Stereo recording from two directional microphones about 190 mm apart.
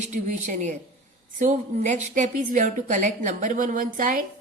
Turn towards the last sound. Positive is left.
turn(degrees=-45)  # may be behind; listen again after turning